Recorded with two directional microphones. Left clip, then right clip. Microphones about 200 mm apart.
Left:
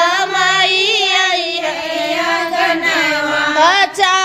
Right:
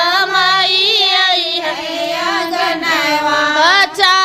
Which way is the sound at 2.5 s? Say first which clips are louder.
Left 2 dB; 40° right (ahead or behind).